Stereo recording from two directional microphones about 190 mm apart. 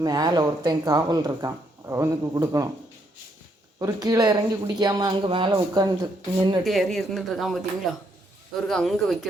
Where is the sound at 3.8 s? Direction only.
20° right (ahead or behind).